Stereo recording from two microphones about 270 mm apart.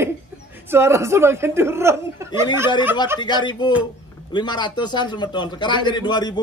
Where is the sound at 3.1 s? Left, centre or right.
Centre.